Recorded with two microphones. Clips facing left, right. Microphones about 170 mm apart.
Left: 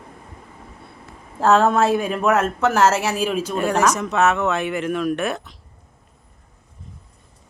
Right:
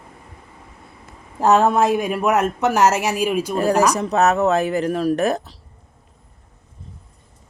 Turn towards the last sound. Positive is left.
turn(degrees=-35)  # may be behind; listen again after turning